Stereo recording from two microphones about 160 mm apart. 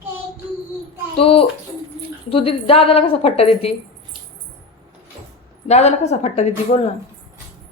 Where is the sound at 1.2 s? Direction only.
35° left (ahead or behind).